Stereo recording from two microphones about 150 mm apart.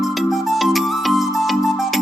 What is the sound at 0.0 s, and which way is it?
Music, centre (ahead or behind).